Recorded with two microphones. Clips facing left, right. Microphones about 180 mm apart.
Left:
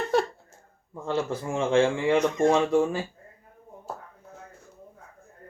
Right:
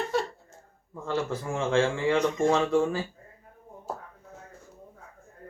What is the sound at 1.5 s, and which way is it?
Speech, 15° left (ahead or behind).